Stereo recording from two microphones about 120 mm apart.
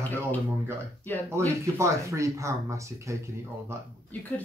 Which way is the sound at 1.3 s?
25° right (ahead or behind).